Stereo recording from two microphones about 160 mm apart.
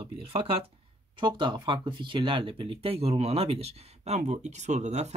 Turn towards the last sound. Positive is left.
turn(degrees=-45)  # may be behind; listen again after turning